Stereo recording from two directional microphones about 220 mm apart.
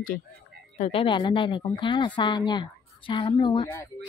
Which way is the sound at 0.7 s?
30° left (ahead or behind).